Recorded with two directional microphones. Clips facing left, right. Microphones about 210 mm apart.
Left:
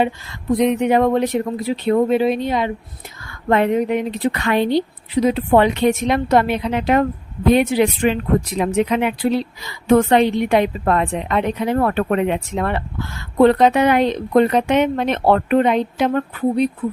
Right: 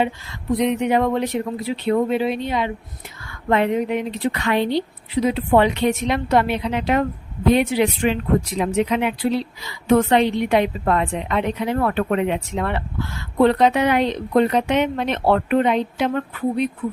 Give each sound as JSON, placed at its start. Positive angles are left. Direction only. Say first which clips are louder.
{"t": 0.6, "sound": "speech", "louder": "left 3 dB", "side_deg": 45}